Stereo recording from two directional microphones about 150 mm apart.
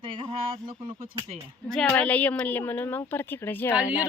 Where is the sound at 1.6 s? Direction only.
5° left (ahead or behind).